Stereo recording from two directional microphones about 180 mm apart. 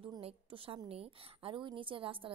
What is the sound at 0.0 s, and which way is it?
A woman's voice, 30° right (ahead or behind).